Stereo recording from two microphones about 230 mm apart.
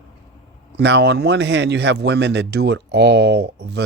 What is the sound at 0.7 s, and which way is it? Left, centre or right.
Speech, right.